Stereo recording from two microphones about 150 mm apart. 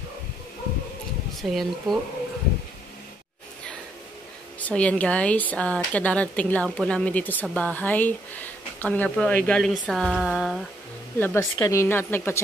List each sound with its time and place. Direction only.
1.5 s speech: centre (ahead or behind)
4.6 s speech: 10° left (ahead or behind)
11.1 s speech: 15° left (ahead or behind)